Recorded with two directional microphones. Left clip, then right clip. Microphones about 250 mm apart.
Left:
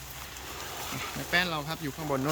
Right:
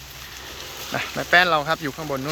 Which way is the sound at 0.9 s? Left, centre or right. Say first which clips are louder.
Right 12 dB; centre.